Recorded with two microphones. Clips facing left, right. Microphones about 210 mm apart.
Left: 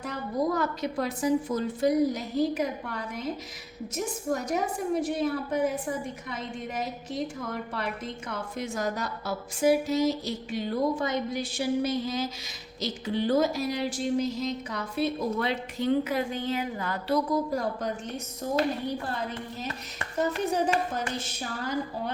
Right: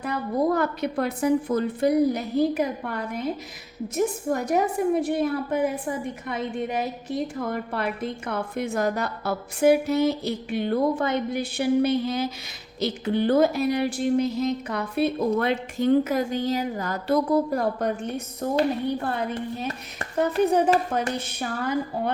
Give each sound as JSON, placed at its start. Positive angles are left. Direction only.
{"t": 0.0, "sound": "a woman's voice", "side_deg": -60}
{"t": 17.2, "sound": "a woman's voice", "side_deg": -60}